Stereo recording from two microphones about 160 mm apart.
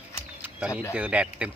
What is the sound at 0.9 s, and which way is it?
Speech, 10° right (ahead or behind).